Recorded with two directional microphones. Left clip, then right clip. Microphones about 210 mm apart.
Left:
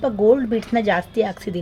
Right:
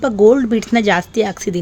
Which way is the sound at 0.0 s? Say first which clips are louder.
Right 5 dB; 45° right (ahead or behind).